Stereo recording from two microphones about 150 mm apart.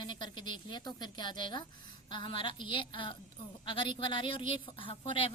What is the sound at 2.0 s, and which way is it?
A woman's voice, 35° left (ahead or behind).